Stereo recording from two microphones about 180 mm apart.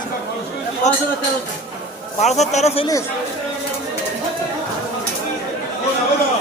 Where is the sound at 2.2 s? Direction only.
40° left (ahead or behind).